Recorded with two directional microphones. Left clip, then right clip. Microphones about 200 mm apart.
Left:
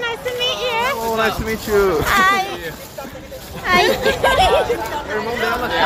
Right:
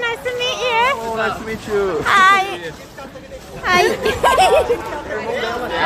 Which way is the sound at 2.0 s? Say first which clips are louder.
Right 3 dB; 20° right (ahead or behind).